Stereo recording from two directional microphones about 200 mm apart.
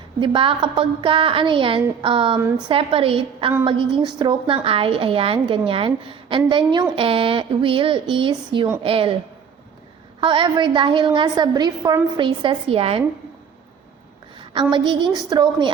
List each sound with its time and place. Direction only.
0.2 s a woman's voice: 25° right (ahead or behind)
10.2 s a woman's voice: 25° right (ahead or behind)
14.5 s a woman's voice: 25° right (ahead or behind)